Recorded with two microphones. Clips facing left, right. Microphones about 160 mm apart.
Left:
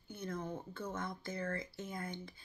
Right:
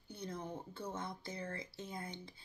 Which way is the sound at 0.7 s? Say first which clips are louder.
Left 1 dB; 25° right (ahead or behind).